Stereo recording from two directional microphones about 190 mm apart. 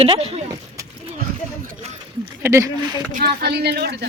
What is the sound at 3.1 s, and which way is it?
Speech, 60° right (ahead or behind).